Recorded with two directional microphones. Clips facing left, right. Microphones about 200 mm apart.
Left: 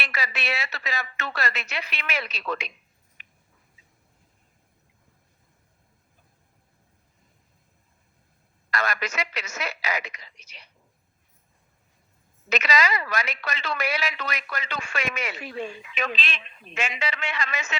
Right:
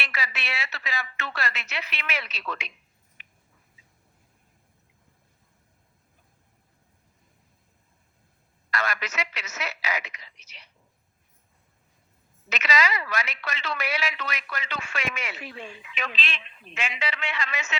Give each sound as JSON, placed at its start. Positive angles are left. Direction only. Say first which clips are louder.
{"t": 0.0, "sound": "a woman's voice", "louder": "left 3 dB", "side_deg": 40}
{"t": 3.2, "sound": "a sound", "louder": "even", "side_deg": 45}
{"t": 8.7, "sound": "speech", "louder": "left 2 dB", "side_deg": 40}
{"t": 12.5, "sound": "speech", "louder": "left 2 dB", "side_deg": 40}